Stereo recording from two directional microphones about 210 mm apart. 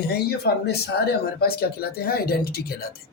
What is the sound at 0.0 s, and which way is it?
Speech, 50° left (ahead or behind).